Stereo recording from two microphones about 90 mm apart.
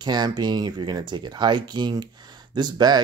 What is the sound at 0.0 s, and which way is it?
Speech, 50° right (ahead or behind).